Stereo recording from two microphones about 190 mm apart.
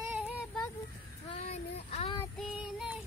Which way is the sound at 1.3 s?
35° left (ahead or behind).